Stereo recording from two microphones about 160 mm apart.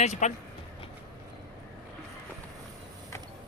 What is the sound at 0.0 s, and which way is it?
Speech, 45° left (ahead or behind).